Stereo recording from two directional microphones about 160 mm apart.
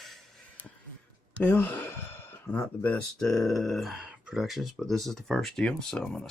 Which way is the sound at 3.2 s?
Centre (ahead or behind).